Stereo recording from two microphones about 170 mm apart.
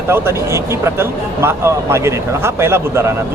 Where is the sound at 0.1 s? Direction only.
15° right (ahead or behind).